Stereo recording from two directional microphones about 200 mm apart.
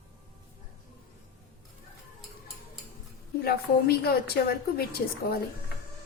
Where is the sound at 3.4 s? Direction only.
50° left (ahead or behind).